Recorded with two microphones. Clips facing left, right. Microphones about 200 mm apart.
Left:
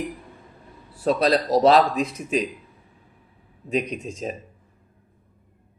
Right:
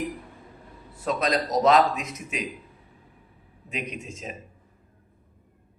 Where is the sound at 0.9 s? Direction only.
30° left (ahead or behind).